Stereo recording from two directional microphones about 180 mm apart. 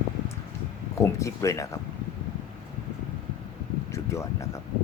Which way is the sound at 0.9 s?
15° left (ahead or behind).